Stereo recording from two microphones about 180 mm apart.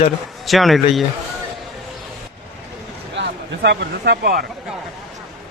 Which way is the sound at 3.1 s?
70° right (ahead or behind).